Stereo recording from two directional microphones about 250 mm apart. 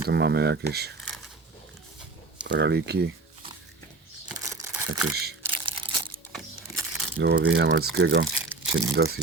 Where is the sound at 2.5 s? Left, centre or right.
Right.